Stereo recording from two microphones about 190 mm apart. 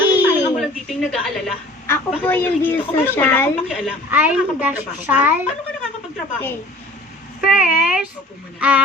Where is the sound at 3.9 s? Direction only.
10° right (ahead or behind).